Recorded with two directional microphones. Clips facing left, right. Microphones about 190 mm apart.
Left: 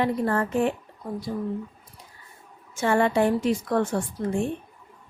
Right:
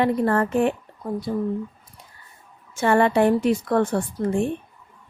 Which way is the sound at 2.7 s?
65° right (ahead or behind).